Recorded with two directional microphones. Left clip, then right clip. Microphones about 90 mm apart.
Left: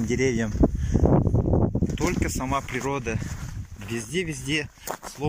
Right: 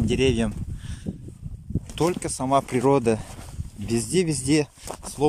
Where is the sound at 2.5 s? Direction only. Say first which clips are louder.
Right 10 dB; 50° right (ahead or behind).